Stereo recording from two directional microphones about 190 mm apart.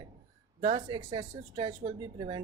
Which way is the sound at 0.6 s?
25° right (ahead or behind).